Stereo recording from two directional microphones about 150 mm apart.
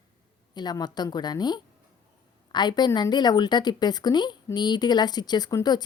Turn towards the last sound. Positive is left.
turn(degrees=25)  # may be behind; listen again after turning